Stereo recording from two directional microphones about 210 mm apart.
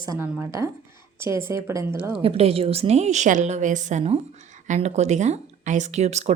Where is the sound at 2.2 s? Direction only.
30° right (ahead or behind).